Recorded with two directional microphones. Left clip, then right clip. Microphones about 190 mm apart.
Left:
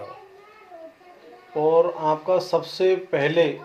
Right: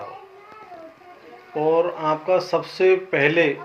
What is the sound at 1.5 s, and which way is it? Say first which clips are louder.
Speech: left 1 dB; 15° left (ahead or behind).